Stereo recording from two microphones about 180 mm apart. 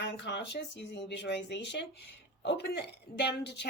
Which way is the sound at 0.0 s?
70° left (ahead or behind).